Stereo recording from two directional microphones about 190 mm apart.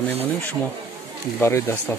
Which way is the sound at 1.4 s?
15° left (ahead or behind).